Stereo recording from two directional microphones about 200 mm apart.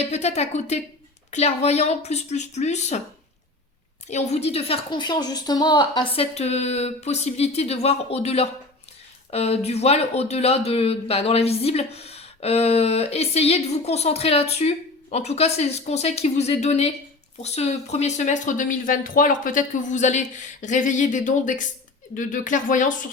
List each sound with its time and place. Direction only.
0.0 s speech: 35° left (ahead or behind)
4.1 s speech: 35° left (ahead or behind)